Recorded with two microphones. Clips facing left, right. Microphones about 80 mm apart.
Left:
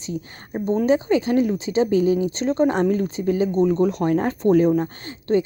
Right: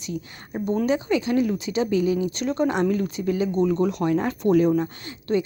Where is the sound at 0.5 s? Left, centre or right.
Left.